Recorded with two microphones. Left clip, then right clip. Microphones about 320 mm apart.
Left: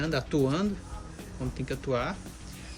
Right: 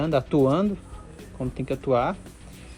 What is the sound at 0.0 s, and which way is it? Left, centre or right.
Speech, right.